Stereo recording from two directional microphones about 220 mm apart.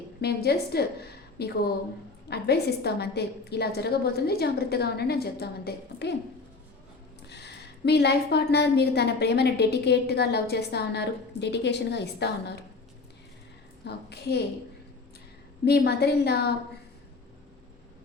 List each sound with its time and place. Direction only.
0.2 s a woman's voice: 45° left (ahead or behind)
7.3 s a woman's voice: 50° left (ahead or behind)
13.8 s a woman's voice: 50° left (ahead or behind)
15.6 s a woman's voice: 45° left (ahead or behind)